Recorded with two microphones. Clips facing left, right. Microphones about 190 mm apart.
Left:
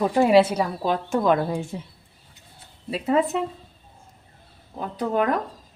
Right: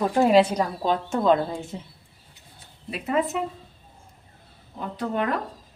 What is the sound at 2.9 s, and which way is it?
Speech, 30° left (ahead or behind).